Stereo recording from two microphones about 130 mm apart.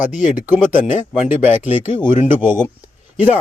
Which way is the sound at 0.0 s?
75° left (ahead or behind).